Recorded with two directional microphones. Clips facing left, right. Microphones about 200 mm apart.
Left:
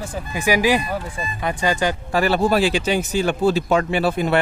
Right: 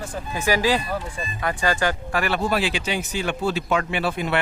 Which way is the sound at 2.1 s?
35° left (ahead or behind).